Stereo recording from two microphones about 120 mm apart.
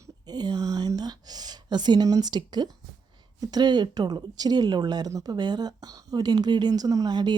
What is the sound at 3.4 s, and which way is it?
Speech, 35° right (ahead or behind).